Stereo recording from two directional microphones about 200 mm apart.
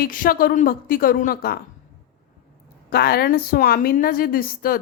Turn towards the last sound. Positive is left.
turn(degrees=45)  # may be behind; listen again after turning